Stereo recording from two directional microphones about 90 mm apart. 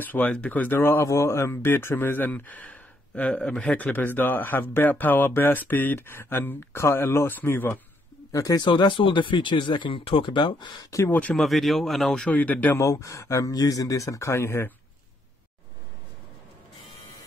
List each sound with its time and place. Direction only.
0.0 s speech: 20° left (ahead or behind)
8.3 s speech: 45° left (ahead or behind)
10.8 s speech: 35° left (ahead or behind)
11.1 s speech: 15° left (ahead or behind)
11.3 s speech: centre (ahead or behind); by 12.8 s 20° left (ahead or behind)
12.8 s speech: 35° left (ahead or behind)